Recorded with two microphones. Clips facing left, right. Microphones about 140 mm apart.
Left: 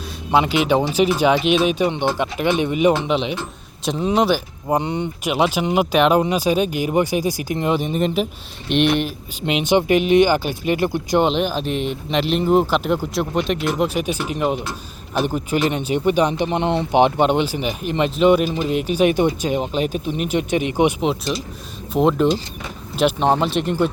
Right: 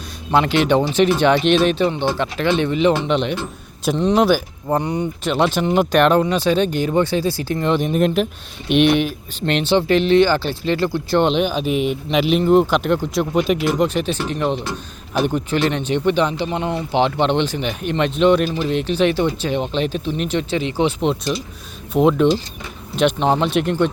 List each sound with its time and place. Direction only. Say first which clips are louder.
0.3 s speech: right 1 dB; 10° left (ahead or behind)
4.7 s speech: right 1 dB; 25° left (ahead or behind)
5.2 s speech: right 1 dB; 10° left (ahead or behind)
7.8 s speech: right 3 dB; centre (ahead or behind)
9.6 s speech: even; 15° left (ahead or behind)
11.2 s a man's voice: right 2 dB; centre (ahead or behind)
21.0 s speech: right 1 dB; centre (ahead or behind)